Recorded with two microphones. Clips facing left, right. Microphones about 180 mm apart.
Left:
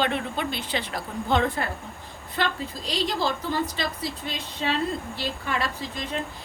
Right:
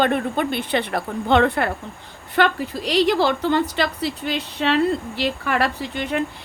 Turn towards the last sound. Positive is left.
turn(degrees=-70)  # may be behind; listen again after turning